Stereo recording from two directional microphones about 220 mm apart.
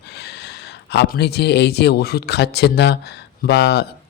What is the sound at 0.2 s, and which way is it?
Speech, 50° left (ahead or behind).